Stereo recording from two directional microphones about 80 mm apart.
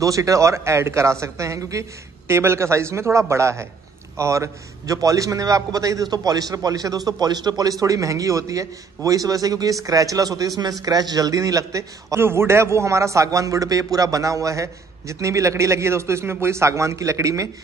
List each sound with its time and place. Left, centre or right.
0.0 s a man's voice: right
12.2 s a man's voice: right